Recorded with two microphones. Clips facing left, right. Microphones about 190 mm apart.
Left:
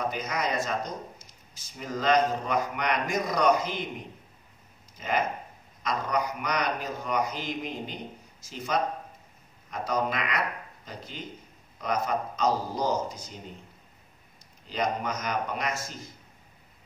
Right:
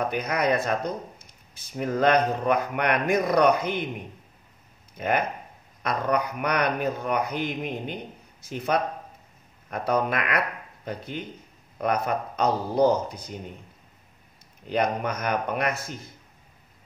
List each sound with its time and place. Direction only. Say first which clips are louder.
0.1 s speech: right 6 dB; 60° right (ahead or behind)
4.9 s speech: right 3 dB; 60° right (ahead or behind)
14.7 s speech: right 4 dB; 60° right (ahead or behind)